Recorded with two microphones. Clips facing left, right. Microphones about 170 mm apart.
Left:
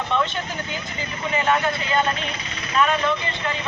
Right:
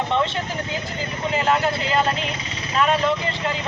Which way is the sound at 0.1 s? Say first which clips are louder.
Right 2 dB; 30° right (ahead or behind).